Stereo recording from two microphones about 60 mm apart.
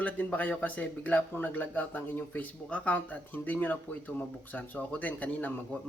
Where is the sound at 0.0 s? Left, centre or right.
Left.